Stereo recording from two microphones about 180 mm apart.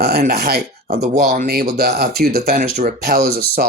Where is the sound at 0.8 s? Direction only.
40° right (ahead or behind).